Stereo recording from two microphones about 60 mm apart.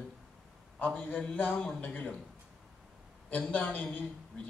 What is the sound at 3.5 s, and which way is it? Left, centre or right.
Speech, left.